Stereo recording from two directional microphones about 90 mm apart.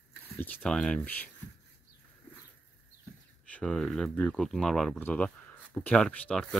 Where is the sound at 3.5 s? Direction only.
5° left (ahead or behind).